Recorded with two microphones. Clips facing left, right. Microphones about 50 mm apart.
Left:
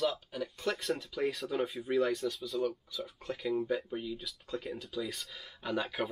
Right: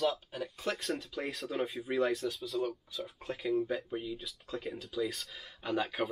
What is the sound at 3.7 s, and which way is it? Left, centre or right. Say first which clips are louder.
Speech: left 1 dB; centre.